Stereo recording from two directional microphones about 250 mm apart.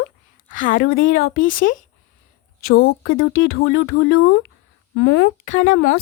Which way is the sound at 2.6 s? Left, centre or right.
Left.